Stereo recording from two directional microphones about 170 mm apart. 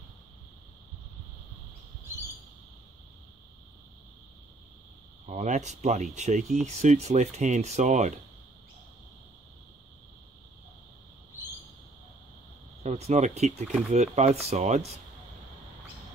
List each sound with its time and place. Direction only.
5.2 s speech: 45° right (ahead or behind)
12.8 s speech: 40° right (ahead or behind)